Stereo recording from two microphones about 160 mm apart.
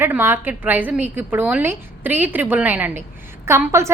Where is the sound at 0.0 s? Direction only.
15° right (ahead or behind).